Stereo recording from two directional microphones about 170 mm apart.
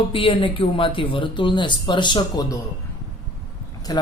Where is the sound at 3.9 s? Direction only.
25° left (ahead or behind).